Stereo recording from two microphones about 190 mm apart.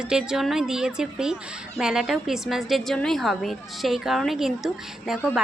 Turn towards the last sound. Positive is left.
turn(degrees=0)  # may be behind; listen again after turning